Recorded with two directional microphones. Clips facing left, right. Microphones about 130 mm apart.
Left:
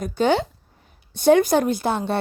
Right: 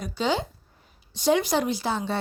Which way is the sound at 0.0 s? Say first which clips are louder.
Left 6 dB; 55° left (ahead or behind).